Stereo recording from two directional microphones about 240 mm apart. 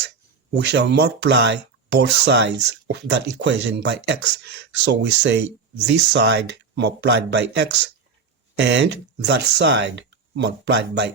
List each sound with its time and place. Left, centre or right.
0.5 s speech: right